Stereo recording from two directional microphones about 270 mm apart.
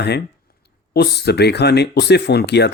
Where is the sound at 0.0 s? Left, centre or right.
Left.